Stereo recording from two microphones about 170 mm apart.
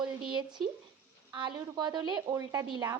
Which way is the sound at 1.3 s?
25° right (ahead or behind).